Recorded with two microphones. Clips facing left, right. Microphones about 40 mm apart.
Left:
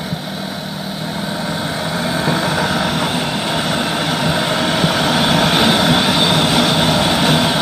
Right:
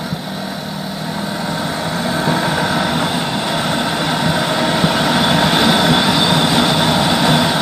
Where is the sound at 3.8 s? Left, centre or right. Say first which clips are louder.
Right 1 dB; centre.